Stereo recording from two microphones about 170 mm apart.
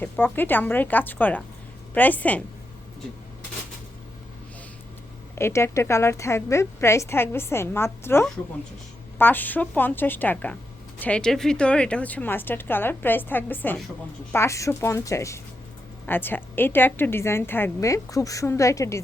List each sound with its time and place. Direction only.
0.0 s a woman's voice: 10° left (ahead or behind)
5.3 s a woman's voice: 15° left (ahead or behind)